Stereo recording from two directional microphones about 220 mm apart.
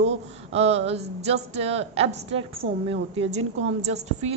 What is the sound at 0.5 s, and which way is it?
A woman's voice, 30° right (ahead or behind).